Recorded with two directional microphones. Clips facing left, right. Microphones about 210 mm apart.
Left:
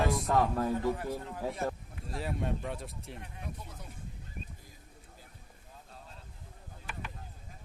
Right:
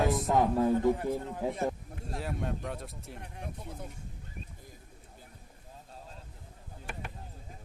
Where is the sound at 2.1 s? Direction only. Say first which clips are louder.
Left 1 dB; centre (ahead or behind).